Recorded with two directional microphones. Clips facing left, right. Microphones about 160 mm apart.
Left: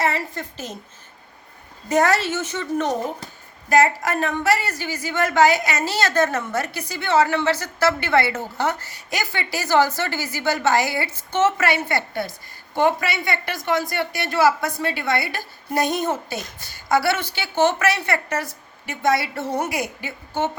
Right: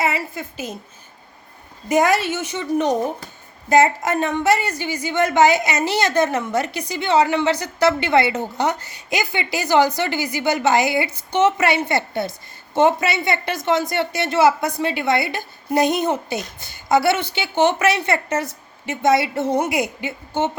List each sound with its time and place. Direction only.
0.0 s a woman's voice: 10° right (ahead or behind)
1.9 s a woman's voice: 15° right (ahead or behind)